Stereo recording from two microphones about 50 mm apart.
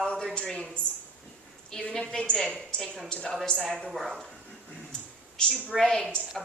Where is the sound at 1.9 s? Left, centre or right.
Centre.